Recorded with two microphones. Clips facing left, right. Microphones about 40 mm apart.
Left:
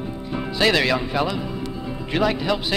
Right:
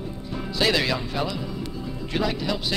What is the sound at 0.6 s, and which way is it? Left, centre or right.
Speech, centre.